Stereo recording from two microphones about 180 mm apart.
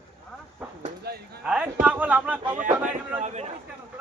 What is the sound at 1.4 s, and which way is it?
Speech, 5° right (ahead or behind).